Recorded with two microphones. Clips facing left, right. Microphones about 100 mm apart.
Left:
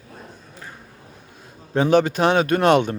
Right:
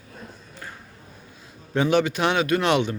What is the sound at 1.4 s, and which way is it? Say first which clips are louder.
A man's voice: left 3 dB; 40° left (ahead or behind).